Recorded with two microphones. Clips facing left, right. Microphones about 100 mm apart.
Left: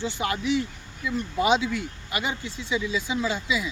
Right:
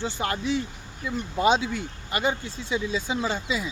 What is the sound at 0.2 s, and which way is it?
Speech, 35° right (ahead or behind).